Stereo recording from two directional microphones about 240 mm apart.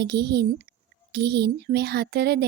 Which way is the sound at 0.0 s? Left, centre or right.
Right.